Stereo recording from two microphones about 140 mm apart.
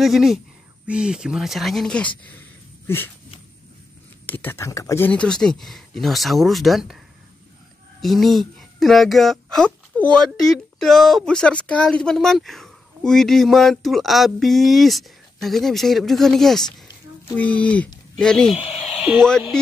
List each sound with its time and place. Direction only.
0.0 s speech: centre (ahead or behind)
4.3 s speech: 15° left (ahead or behind)
8.0 s speech: centre (ahead or behind)
18.6 s speech: 45° left (ahead or behind)
18.9 s speech: centre (ahead or behind)